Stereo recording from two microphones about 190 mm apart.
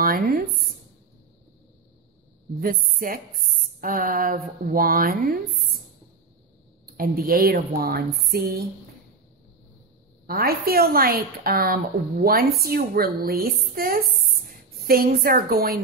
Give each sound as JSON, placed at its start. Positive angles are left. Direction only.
{"t": 0.0, "sound": "speech", "side_deg": -50}
{"t": 2.9, "sound": "a woman's voice", "side_deg": -50}
{"t": 6.9, "sound": "a woman's voice", "side_deg": -50}
{"t": 10.2, "sound": "a woman's voice", "side_deg": -50}